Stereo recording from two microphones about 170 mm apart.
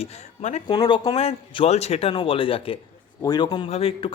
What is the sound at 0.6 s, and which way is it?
A man's voice, 25° left (ahead or behind).